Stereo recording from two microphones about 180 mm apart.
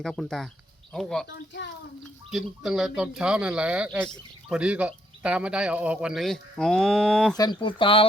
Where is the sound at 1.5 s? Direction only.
75° left (ahead or behind).